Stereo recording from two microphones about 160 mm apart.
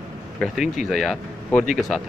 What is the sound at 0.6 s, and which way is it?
Speech, 50° left (ahead or behind).